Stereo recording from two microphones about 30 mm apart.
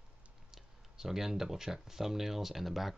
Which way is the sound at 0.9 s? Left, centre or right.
Centre.